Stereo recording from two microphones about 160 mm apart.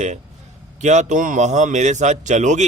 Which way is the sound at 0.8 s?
45° right (ahead or behind).